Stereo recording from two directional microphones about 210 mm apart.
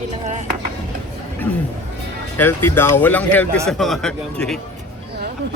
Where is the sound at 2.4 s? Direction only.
10° left (ahead or behind).